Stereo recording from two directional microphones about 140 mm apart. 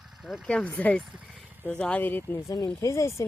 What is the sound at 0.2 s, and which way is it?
Speech, centre (ahead or behind).